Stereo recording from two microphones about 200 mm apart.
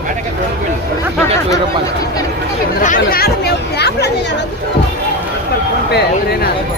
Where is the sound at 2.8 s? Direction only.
45° left (ahead or behind).